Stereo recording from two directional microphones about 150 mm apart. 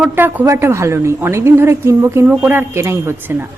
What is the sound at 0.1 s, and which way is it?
A woman's voice, 15° right (ahead or behind).